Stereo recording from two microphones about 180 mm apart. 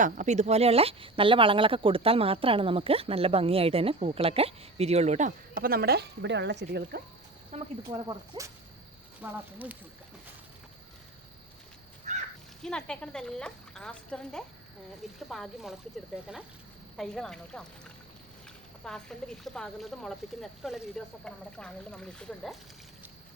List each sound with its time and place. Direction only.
0.0 s speech: 40° right (ahead or behind); by 7.0 s 65° right (ahead or behind)
7.5 s speech: 40° right (ahead or behind)
8.3 s speech: 25° right (ahead or behind)
9.2 s speech: 10° right (ahead or behind)
12.1 s crow: 40° right (ahead or behind)
12.6 s speech: 5° left (ahead or behind)
17.0 s speech: centre (ahead or behind)